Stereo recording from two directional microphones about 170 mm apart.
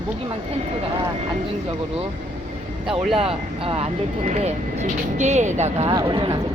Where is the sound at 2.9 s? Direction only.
30° right (ahead or behind).